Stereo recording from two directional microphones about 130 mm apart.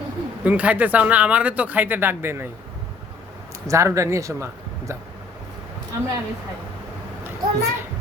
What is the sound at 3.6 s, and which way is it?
Speech, 25° right (ahead or behind).